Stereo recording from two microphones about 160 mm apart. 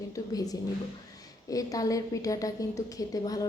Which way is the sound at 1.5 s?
20° left (ahead or behind).